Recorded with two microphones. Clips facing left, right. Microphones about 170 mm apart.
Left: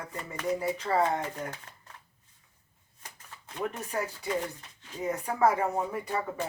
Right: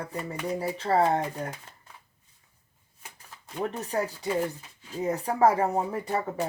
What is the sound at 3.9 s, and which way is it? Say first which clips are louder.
Speech: right 5 dB; 35° right (ahead or behind).